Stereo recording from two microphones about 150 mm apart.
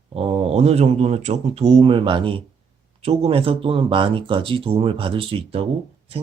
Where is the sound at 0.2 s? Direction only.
40° right (ahead or behind).